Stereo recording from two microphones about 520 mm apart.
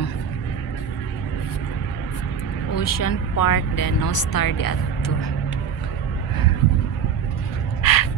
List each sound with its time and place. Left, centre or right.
2.7 s speech: left
7.8 s crow: left